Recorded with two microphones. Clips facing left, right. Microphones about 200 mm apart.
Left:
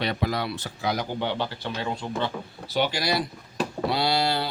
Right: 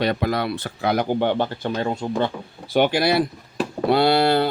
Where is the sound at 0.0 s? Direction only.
50° right (ahead or behind).